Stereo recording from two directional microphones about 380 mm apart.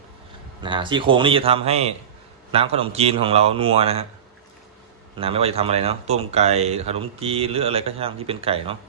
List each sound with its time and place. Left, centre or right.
0.6 s speech: centre
5.1 s speech: centre